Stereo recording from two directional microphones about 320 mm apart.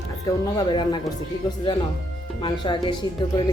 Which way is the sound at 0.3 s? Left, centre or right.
Centre.